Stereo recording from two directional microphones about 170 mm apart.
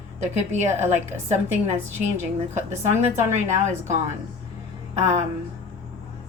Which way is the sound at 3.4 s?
45° right (ahead or behind).